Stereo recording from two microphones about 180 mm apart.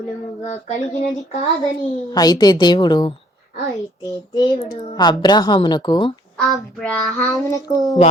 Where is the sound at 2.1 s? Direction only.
20° left (ahead or behind).